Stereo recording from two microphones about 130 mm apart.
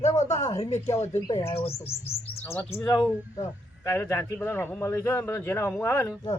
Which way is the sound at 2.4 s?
10° left (ahead or behind).